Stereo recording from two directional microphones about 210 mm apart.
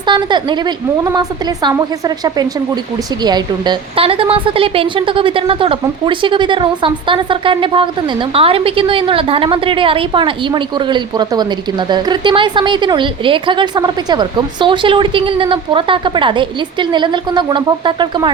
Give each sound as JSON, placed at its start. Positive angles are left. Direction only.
{"t": 0.0, "sound": "a woman's voice", "side_deg": -20}